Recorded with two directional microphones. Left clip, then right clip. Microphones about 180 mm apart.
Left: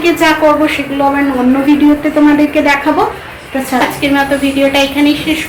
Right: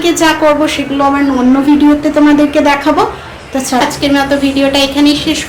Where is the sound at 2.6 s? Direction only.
15° right (ahead or behind).